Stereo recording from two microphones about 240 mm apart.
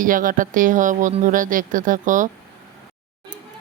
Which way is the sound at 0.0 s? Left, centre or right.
Right.